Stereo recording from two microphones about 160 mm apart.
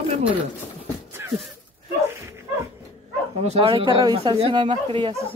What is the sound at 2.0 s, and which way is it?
Dog, 15° right (ahead or behind).